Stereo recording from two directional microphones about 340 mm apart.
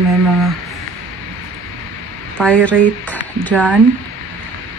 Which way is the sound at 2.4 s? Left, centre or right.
Centre.